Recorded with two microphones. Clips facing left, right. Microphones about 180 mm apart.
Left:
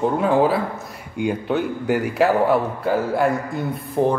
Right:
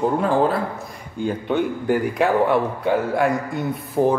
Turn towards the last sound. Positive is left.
turn(degrees=0)  # may be behind; listen again after turning